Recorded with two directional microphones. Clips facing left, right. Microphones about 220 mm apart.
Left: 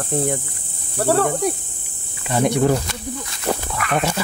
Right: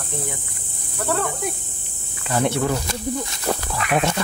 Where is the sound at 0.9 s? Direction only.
35° left (ahead or behind).